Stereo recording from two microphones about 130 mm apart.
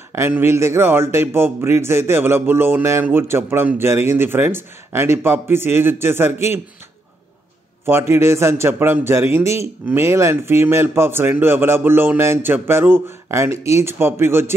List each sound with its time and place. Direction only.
0.1 s a man's voice: 20° right (ahead or behind)
7.8 s a man's voice: 20° right (ahead or behind)